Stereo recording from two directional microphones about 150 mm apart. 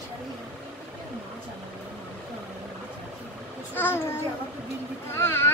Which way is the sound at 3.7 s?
15° left (ahead or behind).